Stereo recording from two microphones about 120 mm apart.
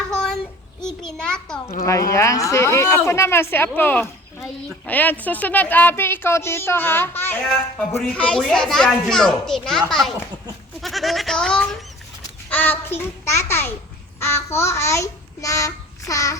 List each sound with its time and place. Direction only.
0.1 s child singing: 5° left (ahead or behind)
1.1 s a woman's voice: 5° left (ahead or behind)
1.6 s a woman's voice: 30° left (ahead or behind); by 9.8 s 5° left (ahead or behind)
10.8 s goat: centre (ahead or behind)
12.5 s a child's voice: 15° left (ahead or behind)